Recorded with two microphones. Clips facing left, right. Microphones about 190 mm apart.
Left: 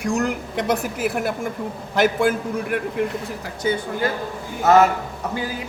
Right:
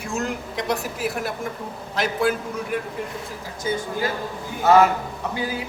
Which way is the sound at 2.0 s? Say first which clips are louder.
Left 4 dB; 50° left (ahead or behind).